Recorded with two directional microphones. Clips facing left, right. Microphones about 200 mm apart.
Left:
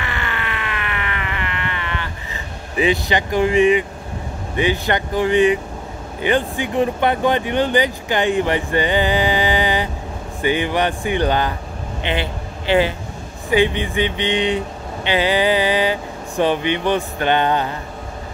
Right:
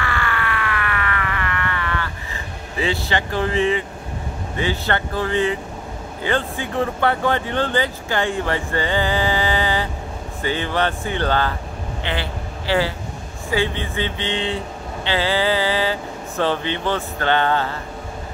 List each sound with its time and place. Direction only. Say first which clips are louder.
0.0 s emergency vehicle: right 2 dB; 20° left (ahead or behind)
4.6 s a man's voice: left 4 dB; 15° left (ahead or behind)